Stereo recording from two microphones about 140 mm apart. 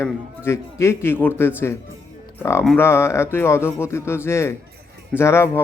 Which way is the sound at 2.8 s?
20° left (ahead or behind).